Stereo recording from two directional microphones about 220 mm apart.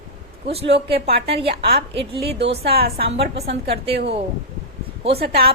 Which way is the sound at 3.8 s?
50° right (ahead or behind).